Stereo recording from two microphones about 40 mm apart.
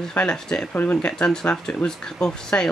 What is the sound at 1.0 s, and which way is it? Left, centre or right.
Speech, left.